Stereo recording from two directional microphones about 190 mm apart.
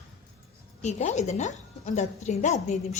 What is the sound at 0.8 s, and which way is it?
A woman's voice, 35° left (ahead or behind).